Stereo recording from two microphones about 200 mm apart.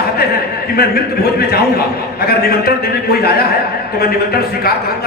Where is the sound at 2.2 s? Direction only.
50° left (ahead or behind).